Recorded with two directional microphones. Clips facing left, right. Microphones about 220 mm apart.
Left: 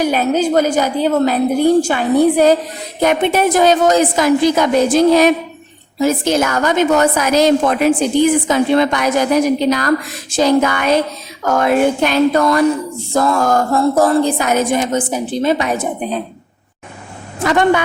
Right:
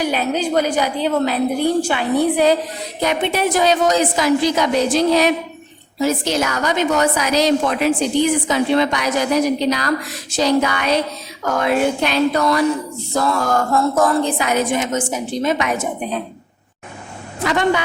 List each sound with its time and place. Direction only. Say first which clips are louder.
0.0 s a woman's voice: left 5 dB; 45° left (ahead or behind)
13.7 s a woman's voice: left 4 dB; 35° left (ahead or behind)
17.4 s speech: left 4 dB; 50° left (ahead or behind)